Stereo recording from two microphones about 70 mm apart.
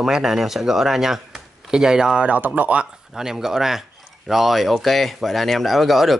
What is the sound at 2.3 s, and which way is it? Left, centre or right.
Speech, right.